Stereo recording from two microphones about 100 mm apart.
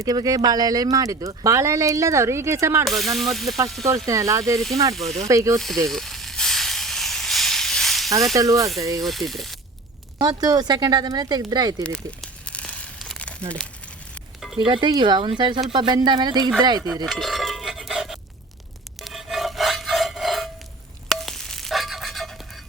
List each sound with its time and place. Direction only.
0.0 s speech: 40° right (ahead or behind)
2.8 s music: centre (ahead or behind)
3.8 s speech: 35° right (ahead or behind)
4.9 s music: centre (ahead or behind)
5.3 s speech: 30° right (ahead or behind)
5.9 s hiss: centre (ahead or behind)
8.4 s speech: 35° right (ahead or behind)
9.0 s music: centre (ahead or behind)
10.2 s speech: 40° right (ahead or behind)
11.8 s crumpling: 10° left (ahead or behind)
14.6 s speech: 55° right (ahead or behind)
17.1 s a sound: centre (ahead or behind)
19.0 s rub: centre (ahead or behind)
21.1 s a sound: centre (ahead or behind)